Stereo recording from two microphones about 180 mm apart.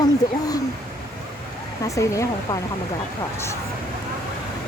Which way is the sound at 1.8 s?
20° left (ahead or behind).